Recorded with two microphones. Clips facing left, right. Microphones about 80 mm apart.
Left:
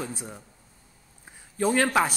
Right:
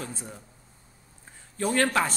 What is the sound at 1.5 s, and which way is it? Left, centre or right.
Speech, centre.